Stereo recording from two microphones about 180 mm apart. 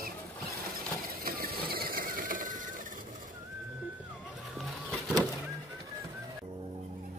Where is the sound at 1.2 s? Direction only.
55° right (ahead or behind).